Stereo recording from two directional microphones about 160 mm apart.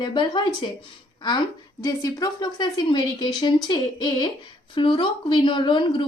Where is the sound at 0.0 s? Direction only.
30° left (ahead or behind).